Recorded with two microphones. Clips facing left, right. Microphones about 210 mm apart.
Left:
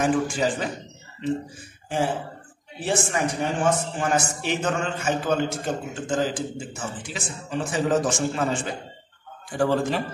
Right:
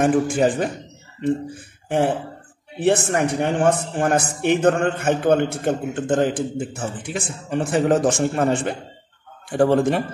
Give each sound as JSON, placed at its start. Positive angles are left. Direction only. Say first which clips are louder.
{"t": 0.0, "sound": "a man's voice", "louder": "right 5 dB", "side_deg": -55}
{"t": 1.9, "sound": "a man's voice", "louder": "right 5 dB", "side_deg": -60}